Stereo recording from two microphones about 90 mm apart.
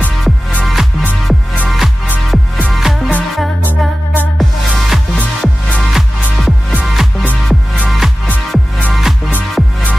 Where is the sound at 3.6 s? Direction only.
20° right (ahead or behind).